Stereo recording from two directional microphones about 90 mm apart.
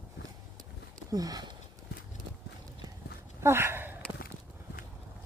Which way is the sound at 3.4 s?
30° right (ahead or behind).